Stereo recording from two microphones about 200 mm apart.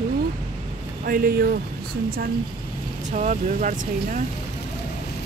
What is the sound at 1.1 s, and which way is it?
Speech, 50° right (ahead or behind).